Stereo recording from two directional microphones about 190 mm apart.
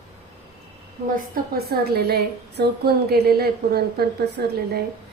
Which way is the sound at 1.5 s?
55° right (ahead or behind).